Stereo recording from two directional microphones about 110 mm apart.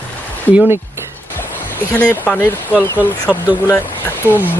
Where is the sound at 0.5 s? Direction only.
15° right (ahead or behind).